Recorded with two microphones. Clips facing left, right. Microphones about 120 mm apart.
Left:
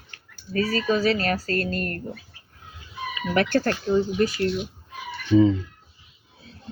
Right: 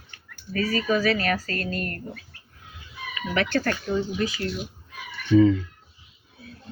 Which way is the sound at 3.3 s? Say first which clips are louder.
Left 3 dB; 35° left (ahead or behind).